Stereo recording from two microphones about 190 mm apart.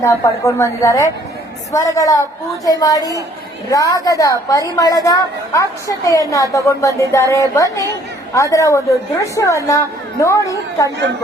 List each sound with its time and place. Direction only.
0.0 s a woman's voice: 15° left (ahead or behind)